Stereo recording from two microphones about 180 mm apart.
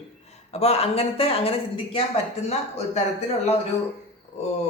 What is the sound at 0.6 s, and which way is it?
Speech, 35° left (ahead or behind).